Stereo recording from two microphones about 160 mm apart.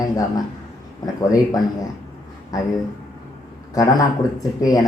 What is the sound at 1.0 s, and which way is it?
Speech, 20° left (ahead or behind).